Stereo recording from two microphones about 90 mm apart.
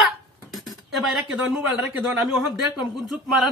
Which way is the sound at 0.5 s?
Centre (ahead or behind).